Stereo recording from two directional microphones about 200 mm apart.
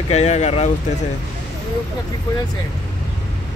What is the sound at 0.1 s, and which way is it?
Speech, 35° left (ahead or behind).